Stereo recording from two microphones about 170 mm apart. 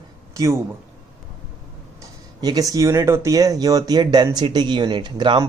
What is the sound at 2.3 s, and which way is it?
Speech, 20° right (ahead or behind).